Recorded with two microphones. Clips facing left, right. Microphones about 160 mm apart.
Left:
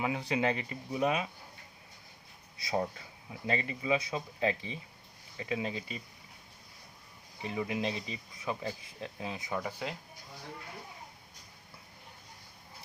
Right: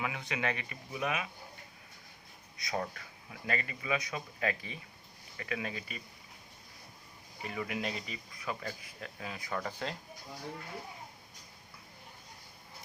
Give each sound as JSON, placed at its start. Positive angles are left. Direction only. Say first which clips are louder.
{"t": 0.0, "sound": "speech", "louder": "left 5 dB", "side_deg": 30}
{"t": 2.6, "sound": "speech", "louder": "left 4 dB", "side_deg": 25}
{"t": 7.4, "sound": "speech", "louder": "left 3 dB", "side_deg": 25}
{"t": 9.6, "sound": "speech", "louder": "right 1 dB", "side_deg": 10}